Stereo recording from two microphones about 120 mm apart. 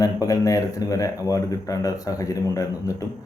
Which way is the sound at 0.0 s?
30° left (ahead or behind).